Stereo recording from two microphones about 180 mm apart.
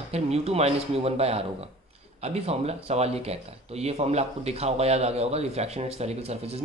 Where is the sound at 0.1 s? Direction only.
35° right (ahead or behind).